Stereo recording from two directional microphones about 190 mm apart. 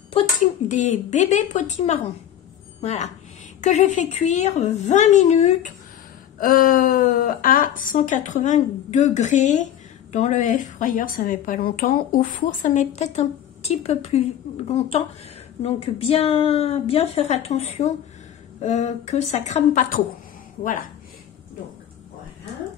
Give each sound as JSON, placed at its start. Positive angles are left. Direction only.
{"t": 0.4, "sound": "a woman's voice", "side_deg": 40}
{"t": 6.4, "sound": "a woman's voice", "side_deg": 50}